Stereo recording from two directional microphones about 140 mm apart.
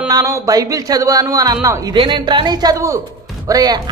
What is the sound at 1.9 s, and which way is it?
Speech, 35° right (ahead or behind).